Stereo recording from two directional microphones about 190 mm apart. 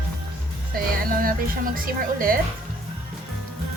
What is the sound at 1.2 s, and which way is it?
Speech, 50° right (ahead or behind).